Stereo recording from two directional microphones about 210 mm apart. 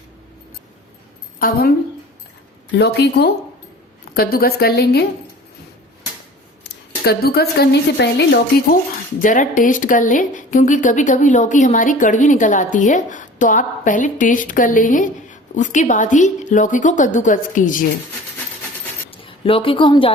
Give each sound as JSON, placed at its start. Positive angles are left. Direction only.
{"t": 1.4, "sound": "a woman's voice", "side_deg": 45}
{"t": 2.7, "sound": "a woman's voice", "side_deg": 50}
{"t": 7.0, "sound": "a woman's voice", "side_deg": 45}
{"t": 9.2, "sound": "a woman's voice", "side_deg": 40}
{"t": 19.1, "sound": "a woman's voice", "side_deg": 25}